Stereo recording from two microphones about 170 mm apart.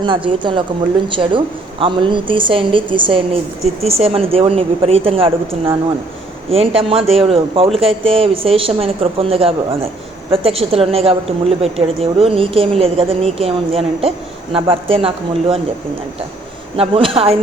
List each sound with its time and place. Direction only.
0.0 s a woman's voice: 30° right (ahead or behind)
16.7 s a woman's voice: 35° right (ahead or behind)